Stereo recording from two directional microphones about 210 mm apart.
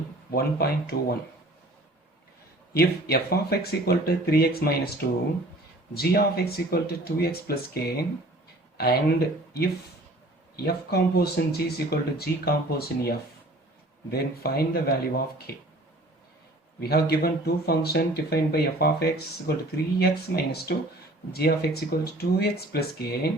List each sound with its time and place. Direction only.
0.3 s speech: 45° left (ahead or behind)
2.7 s speech: 50° left (ahead or behind)
14.1 s speech: 50° left (ahead or behind)
16.9 s speech: 50° left (ahead or behind)